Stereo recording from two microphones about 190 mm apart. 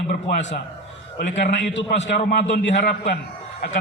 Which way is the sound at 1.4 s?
65° left (ahead or behind).